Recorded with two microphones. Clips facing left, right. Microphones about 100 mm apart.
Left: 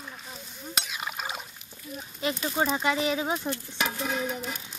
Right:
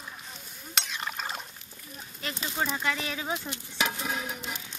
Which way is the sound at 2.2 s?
20° left (ahead or behind).